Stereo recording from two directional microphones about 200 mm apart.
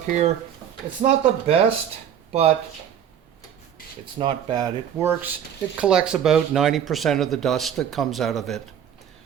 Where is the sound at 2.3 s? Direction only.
30° right (ahead or behind).